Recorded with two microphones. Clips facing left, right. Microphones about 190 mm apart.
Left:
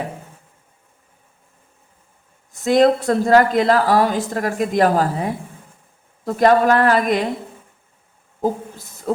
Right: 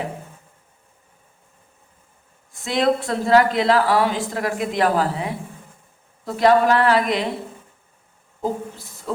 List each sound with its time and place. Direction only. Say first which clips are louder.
2.5 s a woman's voice: left 6 dB; 40° left (ahead or behind)
9.1 s a woman's voice: left 5 dB; 45° left (ahead or behind)